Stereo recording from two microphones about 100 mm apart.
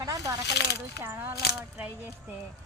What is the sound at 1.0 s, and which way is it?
Speech, 25° right (ahead or behind).